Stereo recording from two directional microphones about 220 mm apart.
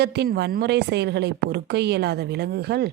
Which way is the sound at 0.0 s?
50° right (ahead or behind).